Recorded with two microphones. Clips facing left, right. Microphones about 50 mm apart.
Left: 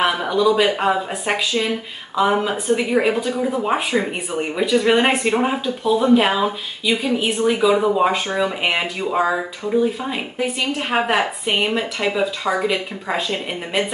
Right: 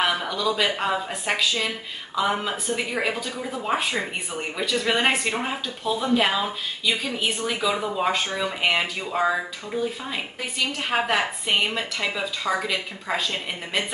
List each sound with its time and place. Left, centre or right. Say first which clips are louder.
0.0 s a woman's voice: left 6 dB; centre